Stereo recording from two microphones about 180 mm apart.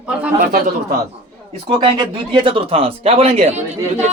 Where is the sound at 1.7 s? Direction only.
25° right (ahead or behind).